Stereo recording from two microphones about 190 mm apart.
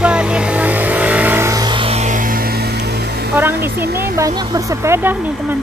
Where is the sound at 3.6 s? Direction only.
55° right (ahead or behind).